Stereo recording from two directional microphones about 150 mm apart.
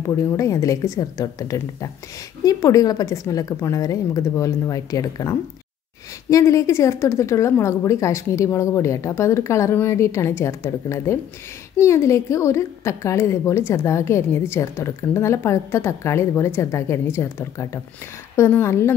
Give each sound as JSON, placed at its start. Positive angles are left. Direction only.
{"t": 0.0, "sound": "a woman's voice", "side_deg": 20}